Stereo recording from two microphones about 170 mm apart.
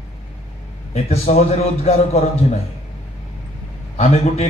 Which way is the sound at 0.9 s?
40° left (ahead or behind).